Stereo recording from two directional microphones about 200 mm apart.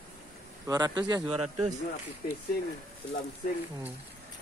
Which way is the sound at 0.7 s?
20° right (ahead or behind).